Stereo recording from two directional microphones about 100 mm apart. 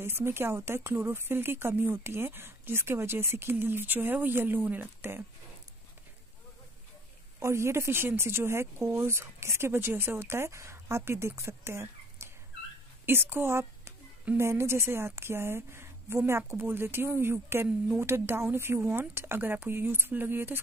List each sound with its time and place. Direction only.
0.0 s speech: 25° right (ahead or behind)
7.3 s a woman's voice: 25° right (ahead or behind)